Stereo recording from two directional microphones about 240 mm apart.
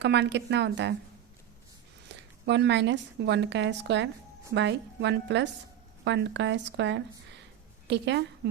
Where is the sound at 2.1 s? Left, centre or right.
Right.